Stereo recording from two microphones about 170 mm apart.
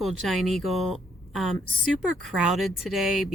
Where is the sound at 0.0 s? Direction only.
Centre (ahead or behind).